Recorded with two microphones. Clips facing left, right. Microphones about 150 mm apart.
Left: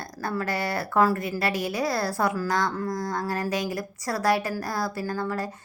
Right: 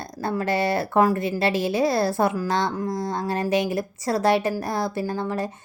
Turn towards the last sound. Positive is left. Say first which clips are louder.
# right 3 dB
turn(degrees=-20)  # may be behind; listen again after turning